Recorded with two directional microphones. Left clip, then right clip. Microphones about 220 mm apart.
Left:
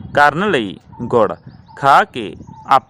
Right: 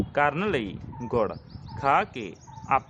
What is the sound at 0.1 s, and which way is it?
A man's voice, 40° left (ahead or behind).